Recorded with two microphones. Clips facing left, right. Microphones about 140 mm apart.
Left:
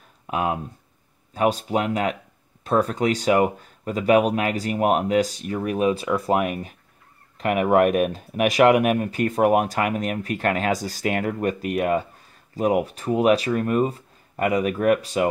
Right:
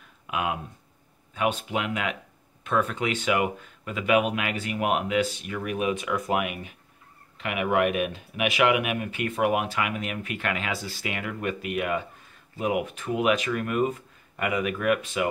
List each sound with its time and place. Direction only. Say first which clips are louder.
0.3 s speech: left 4 dB; 35° left (ahead or behind)